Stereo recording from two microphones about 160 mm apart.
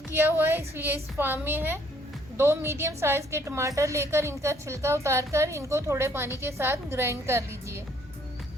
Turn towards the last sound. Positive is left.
turn(degrees=-15)  # may be behind; listen again after turning